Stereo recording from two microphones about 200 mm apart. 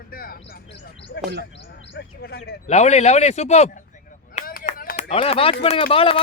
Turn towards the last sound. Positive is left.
turn(degrees=30)  # may be behind; listen again after turning